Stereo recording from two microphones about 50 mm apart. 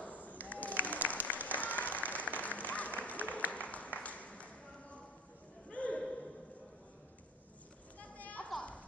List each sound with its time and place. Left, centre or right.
0.0 s applause: left
3.5 s a sound: left
8.0 s children playing: left